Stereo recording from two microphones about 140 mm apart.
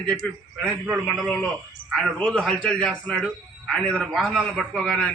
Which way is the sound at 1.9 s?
5° left (ahead or behind).